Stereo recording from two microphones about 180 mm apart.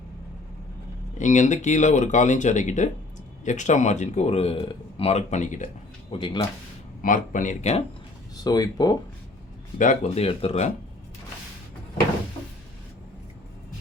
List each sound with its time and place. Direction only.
1.2 s speech: 45° left (ahead or behind)
6.1 s speech: 25° left (ahead or behind)
7.0 s speech: 45° left (ahead or behind)
8.4 s speech: 20° left (ahead or behind)
9.7 s speech: 45° left (ahead or behind)